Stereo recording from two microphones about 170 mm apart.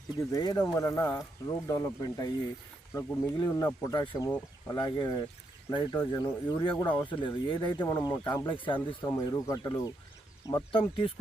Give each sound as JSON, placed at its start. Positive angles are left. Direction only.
{"t": 0.2, "sound": "speech", "side_deg": 20}
{"t": 8.4, "sound": "speech", "side_deg": 30}
{"t": 9.0, "sound": "speech", "side_deg": 15}
{"t": 10.7, "sound": "speech", "side_deg": 30}